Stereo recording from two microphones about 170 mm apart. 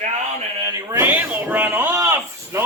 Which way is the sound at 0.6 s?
15° right (ahead or behind).